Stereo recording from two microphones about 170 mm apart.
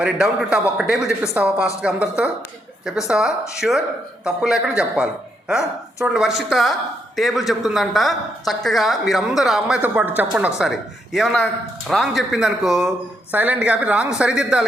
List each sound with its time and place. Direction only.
0.0 s a woman's voice: 5° right (ahead or behind)